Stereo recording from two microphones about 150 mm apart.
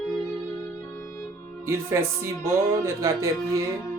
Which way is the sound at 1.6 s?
20° right (ahead or behind).